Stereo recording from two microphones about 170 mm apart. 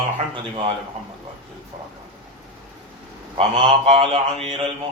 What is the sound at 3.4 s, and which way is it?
Mantra, 35° right (ahead or behind).